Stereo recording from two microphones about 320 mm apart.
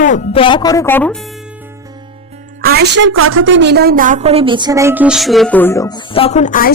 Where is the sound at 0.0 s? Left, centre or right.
Left.